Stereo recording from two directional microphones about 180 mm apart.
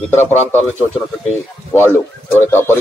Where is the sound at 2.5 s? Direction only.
10° left (ahead or behind).